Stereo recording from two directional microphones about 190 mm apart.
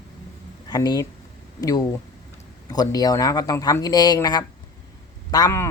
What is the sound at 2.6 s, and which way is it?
Speech, 20° left (ahead or behind).